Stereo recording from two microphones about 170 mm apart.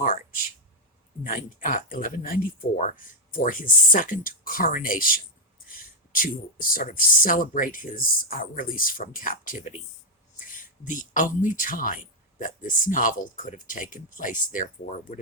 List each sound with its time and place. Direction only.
0.0 s speech: 55° left (ahead or behind)